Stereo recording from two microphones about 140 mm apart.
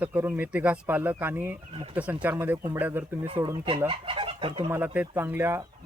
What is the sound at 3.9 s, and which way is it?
Speech, 40° right (ahead or behind).